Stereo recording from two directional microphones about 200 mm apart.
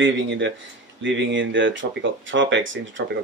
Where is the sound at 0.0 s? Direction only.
65° right (ahead or behind).